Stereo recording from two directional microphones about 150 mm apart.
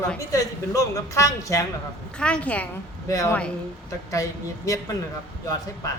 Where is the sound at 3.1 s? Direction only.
20° left (ahead or behind).